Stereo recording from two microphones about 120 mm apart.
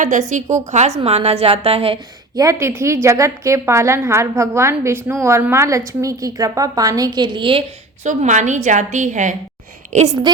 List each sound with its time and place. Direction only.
0.0 s a woman's voice: 90° right
0.7 s a woman's voice: 70° right (ahead or behind); by 2.0 s 55° right (ahead or behind)
2.3 s a woman's voice: 25° right (ahead or behind); by 7.6 s 45° right (ahead or behind)
8.0 s a woman's voice: 85° right